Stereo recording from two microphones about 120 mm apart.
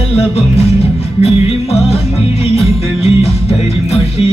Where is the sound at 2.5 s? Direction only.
55° left (ahead or behind).